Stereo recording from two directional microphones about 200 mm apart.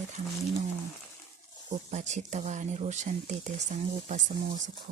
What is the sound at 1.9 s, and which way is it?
Speech, 35° right (ahead or behind).